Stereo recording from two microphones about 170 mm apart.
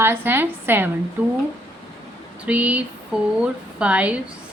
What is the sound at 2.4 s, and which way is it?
A woman's voice, 10° right (ahead or behind).